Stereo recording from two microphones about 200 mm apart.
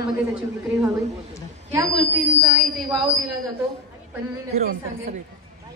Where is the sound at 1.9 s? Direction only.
Centre (ahead or behind).